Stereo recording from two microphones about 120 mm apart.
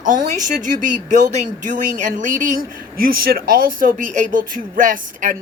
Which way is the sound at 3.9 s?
90° right.